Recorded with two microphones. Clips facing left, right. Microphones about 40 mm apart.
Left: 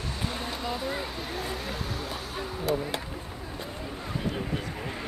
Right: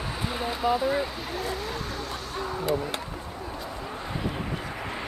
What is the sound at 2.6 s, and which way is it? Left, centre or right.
Speech, centre.